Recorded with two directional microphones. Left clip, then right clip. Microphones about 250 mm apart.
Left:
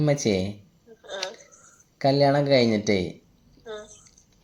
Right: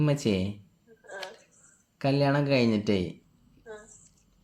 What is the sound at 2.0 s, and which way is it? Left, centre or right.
Speech, centre.